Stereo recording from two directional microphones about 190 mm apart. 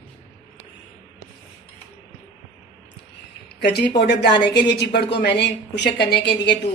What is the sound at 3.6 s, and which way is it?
A woman's voice, 60° left (ahead or behind).